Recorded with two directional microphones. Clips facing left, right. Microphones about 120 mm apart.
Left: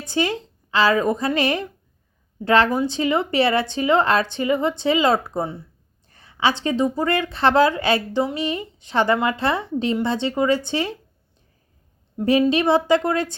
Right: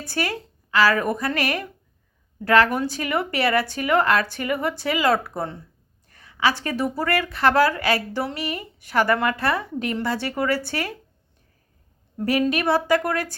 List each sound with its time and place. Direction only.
0.0 s a woman's voice: 20° left (ahead or behind)
12.2 s a woman's voice: 25° left (ahead or behind)